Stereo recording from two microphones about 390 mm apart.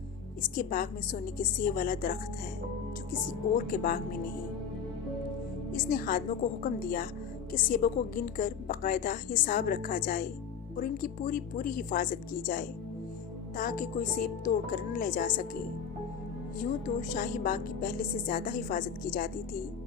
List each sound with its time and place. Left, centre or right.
0.5 s a woman's voice: left
3.7 s a woman's voice: left
5.7 s a woman's voice: left
16.8 s a woman's voice: centre